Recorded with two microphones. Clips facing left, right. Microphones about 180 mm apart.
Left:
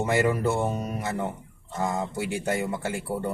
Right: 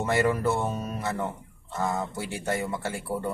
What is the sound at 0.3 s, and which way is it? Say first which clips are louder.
Speech: left 1 dB; 15° left (ahead or behind).